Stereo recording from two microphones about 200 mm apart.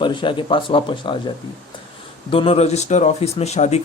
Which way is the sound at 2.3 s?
30° left (ahead or behind).